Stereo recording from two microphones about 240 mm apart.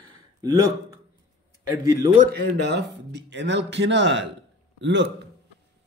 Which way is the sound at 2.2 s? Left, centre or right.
Right.